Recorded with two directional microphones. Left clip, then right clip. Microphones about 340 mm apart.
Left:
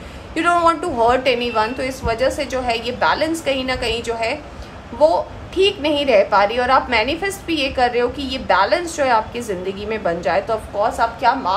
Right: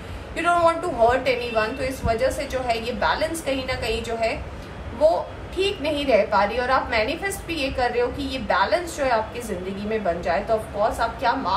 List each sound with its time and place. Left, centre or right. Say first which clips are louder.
0.4 s a woman's voice: left 4 dB; left
5.6 s a woman's voice: left 7 dB; left